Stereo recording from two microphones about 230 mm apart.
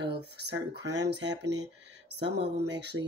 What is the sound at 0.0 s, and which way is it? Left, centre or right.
Speech, right.